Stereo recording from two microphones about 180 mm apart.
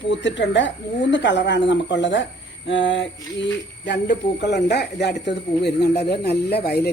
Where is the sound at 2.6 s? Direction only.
90° left.